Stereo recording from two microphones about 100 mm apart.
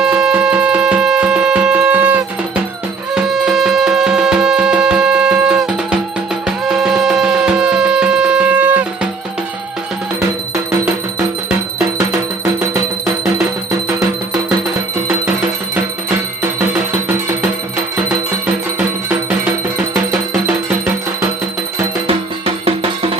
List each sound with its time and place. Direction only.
0.0 s music: 5° right (ahead or behind)
3.2 s music: centre (ahead or behind)
15.7 s music: 20° right (ahead or behind)
19.9 s music: 25° right (ahead or behind)
22.0 s music: 80° right